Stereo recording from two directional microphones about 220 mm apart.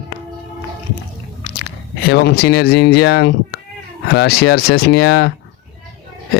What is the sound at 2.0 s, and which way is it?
Speech, 45° left (ahead or behind).